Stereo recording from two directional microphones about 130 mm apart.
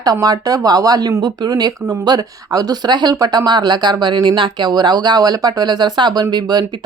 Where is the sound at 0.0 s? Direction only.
30° right (ahead or behind).